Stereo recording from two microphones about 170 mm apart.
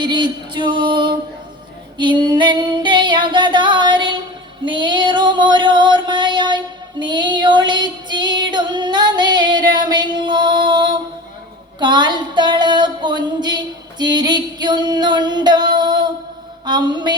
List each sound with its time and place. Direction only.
0.0 s music: 25° right (ahead or behind)
2.0 s female singing: 25° right (ahead or behind)
4.6 s music: 25° right (ahead or behind)
7.0 s female singing: 25° right (ahead or behind)
11.8 s a sound: 25° right (ahead or behind)
16.6 s music: 25° right (ahead or behind)